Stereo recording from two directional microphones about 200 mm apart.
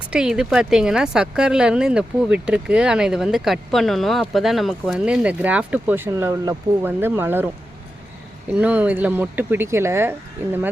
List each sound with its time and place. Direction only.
0.1 s speech: 5° right (ahead or behind)
8.5 s speech: 5° right (ahead or behind)